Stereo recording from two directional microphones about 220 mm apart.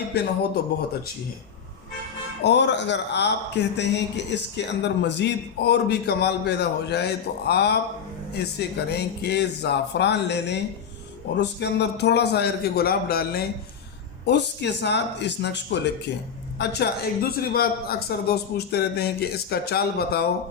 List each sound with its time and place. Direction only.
0.1 s a man's voice: 50° left (ahead or behind)
2.4 s a man's voice: 50° left (ahead or behind)